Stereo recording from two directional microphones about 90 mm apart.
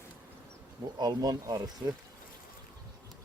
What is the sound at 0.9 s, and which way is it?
Speech, 50° right (ahead or behind).